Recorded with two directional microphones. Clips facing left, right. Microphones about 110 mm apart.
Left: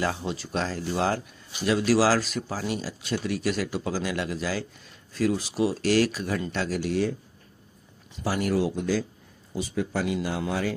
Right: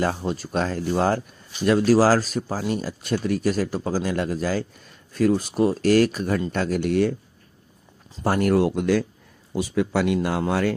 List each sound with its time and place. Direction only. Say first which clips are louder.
0.0 s speech: right 4 dB; 45° right (ahead or behind)
8.2 s speech: right 6 dB; 55° right (ahead or behind)